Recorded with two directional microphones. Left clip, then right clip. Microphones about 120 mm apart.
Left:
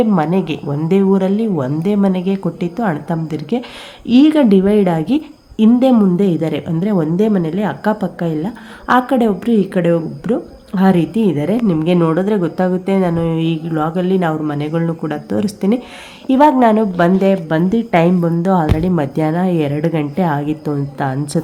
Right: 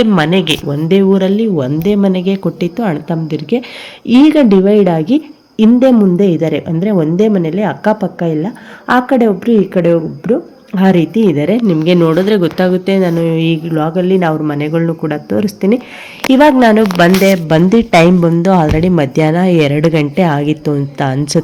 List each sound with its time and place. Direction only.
0.1 s a woman's voice: 5° right (ahead or behind)
16.3 s a woman's voice: 20° right (ahead or behind)